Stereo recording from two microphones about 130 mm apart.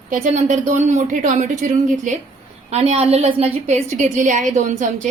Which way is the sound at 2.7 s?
55° right (ahead or behind).